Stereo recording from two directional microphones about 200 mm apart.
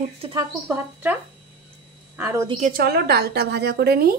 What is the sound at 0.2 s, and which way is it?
Speech, 25° right (ahead or behind).